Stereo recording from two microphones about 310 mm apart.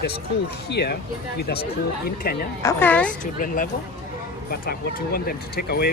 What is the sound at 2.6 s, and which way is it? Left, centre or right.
Speech, centre.